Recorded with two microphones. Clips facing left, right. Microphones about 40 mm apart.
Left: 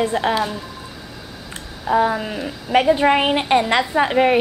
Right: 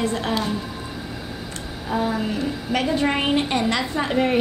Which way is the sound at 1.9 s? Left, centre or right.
Left.